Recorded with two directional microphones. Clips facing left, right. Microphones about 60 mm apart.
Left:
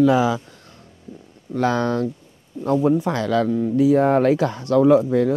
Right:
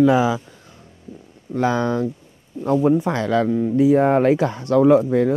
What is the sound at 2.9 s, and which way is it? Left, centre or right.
Speech, right.